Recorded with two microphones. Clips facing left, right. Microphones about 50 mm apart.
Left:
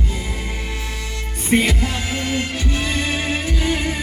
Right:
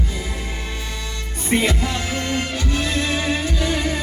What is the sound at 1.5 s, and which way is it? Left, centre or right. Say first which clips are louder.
Music: left 2 dB; centre.